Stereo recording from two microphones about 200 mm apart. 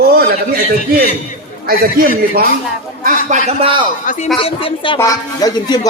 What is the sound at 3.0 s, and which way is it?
Speech, 35° right (ahead or behind).